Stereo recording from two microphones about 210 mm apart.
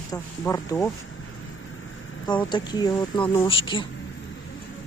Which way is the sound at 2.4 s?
20° left (ahead or behind).